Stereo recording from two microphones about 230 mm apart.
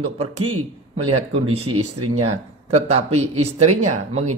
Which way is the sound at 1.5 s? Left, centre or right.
Right.